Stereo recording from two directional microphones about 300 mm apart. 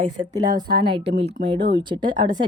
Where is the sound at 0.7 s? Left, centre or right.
Right.